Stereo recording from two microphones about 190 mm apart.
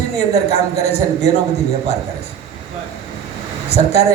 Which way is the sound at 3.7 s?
35° left (ahead or behind).